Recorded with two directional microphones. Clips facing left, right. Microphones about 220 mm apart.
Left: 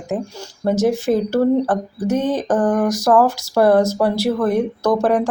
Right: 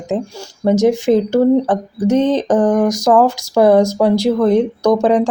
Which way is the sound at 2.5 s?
Centre (ahead or behind).